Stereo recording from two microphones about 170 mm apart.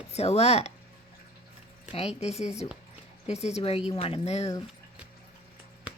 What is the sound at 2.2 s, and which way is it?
Speech, 40° left (ahead or behind).